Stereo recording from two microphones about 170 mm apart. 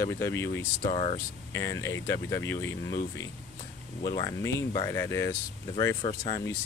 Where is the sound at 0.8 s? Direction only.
35° left (ahead or behind).